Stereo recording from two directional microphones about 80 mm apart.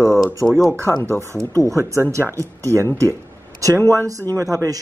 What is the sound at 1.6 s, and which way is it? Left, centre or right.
Speech, right.